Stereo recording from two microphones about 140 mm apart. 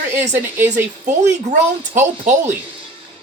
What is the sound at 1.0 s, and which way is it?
Speech, 60° right (ahead or behind).